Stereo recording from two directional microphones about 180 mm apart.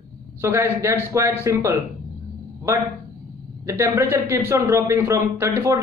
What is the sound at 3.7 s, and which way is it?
A man's voice, 15° right (ahead or behind).